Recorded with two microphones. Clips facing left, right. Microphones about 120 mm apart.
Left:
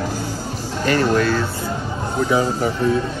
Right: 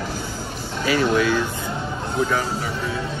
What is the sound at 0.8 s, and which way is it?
Speech, 5° right (ahead or behind).